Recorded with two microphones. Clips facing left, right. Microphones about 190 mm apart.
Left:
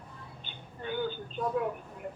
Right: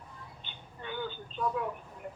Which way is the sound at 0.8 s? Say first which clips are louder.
Left 5 dB; 45° left (ahead or behind).